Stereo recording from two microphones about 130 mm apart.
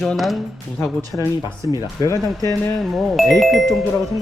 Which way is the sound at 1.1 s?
15° left (ahead or behind).